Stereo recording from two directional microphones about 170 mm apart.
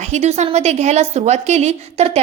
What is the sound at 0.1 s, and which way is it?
A woman's voice, 40° right (ahead or behind).